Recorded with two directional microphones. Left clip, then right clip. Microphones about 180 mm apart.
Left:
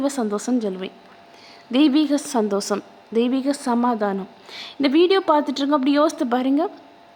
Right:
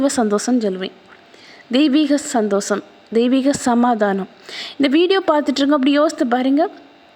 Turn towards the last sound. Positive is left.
turn(degrees=-10)  # may be behind; listen again after turning